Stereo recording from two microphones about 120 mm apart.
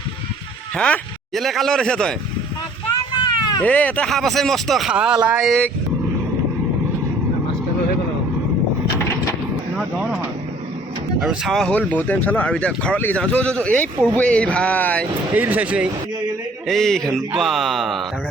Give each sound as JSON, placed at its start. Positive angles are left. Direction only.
{"t": 0.8, "sound": "speech", "side_deg": 5}
{"t": 2.9, "sound": "a sound", "side_deg": 35}
{"t": 3.6, "sound": "speech", "side_deg": 10}
{"t": 5.5, "sound": "speech", "side_deg": 10}
{"t": 11.2, "sound": "speech", "side_deg": 0}
{"t": 15.4, "sound": "speech", "side_deg": -15}
{"t": 16.6, "sound": "speech", "side_deg": 5}